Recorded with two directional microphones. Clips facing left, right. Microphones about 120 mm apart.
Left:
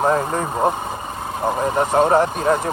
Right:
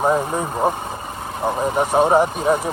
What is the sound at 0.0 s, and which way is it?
Speech, 10° right (ahead or behind).